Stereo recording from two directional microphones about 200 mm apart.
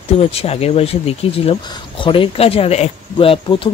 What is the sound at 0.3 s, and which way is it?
Speech, 30° left (ahead or behind).